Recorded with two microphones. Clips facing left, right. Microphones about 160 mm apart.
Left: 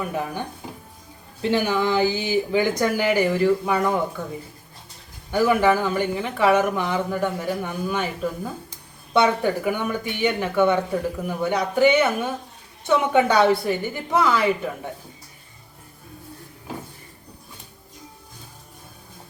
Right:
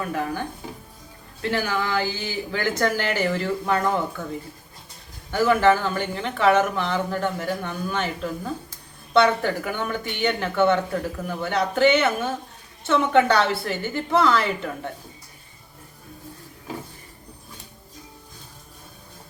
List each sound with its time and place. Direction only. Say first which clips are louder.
0.0 s speech: even; 15° left (ahead or behind)
5.3 s speech: even; 10° left (ahead or behind)